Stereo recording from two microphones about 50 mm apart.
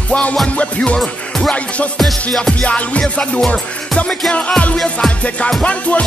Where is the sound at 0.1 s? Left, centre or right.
Left.